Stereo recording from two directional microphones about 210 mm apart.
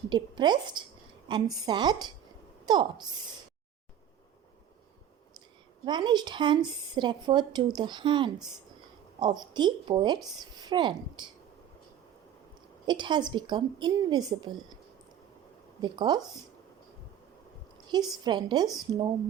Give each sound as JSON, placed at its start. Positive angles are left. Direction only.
{"t": 0.1, "sound": "speech", "side_deg": -20}
{"t": 5.8, "sound": "speech", "side_deg": -20}
{"t": 12.8, "sound": "speech", "side_deg": -20}
{"t": 15.8, "sound": "speech", "side_deg": -20}
{"t": 17.8, "sound": "speech", "side_deg": -20}